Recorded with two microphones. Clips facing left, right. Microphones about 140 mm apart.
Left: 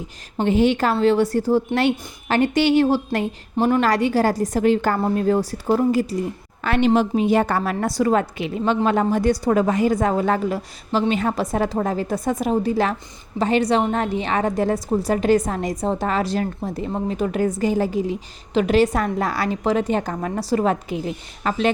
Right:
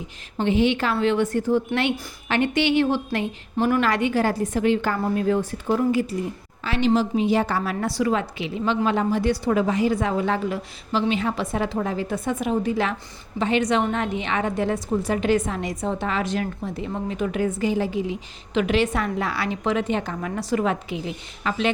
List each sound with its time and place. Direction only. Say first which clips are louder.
0.4 s a woman's voice: left 3 dB; 40° left (ahead or behind)
6.7 s a woman's voice: left 3 dB; 55° left (ahead or behind)